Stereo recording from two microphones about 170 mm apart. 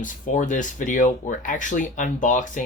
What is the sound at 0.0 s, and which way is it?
Speech, 50° left (ahead or behind).